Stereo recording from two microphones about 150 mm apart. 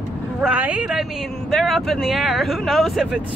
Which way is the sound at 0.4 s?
10° right (ahead or behind).